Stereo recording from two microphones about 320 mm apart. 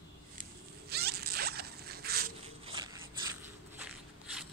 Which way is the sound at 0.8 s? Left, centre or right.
Right.